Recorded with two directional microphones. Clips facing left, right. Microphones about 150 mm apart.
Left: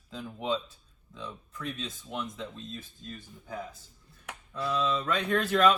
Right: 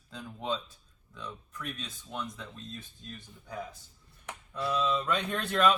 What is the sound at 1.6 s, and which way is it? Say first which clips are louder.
Speech: left 5 dB; 25° left (ahead or behind).